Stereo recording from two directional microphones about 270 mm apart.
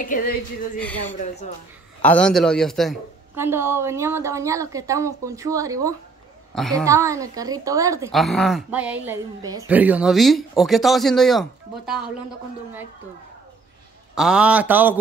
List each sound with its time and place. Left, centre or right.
0.0 s a woman's voice: left
0.7 s a woman's voice: centre
6.5 s a woman's voice: centre
6.9 s a woman's voice: centre
8.1 s a woman's voice: centre
14.1 s a woman's voice: centre